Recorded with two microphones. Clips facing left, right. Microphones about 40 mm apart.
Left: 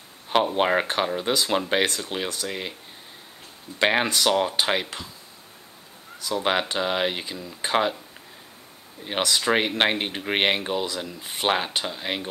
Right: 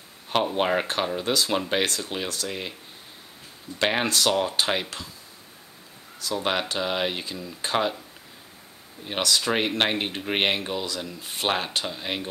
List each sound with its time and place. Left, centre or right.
0.3 s speech: centre
3.8 s speech: centre
6.2 s speech: centre
9.0 s speech: centre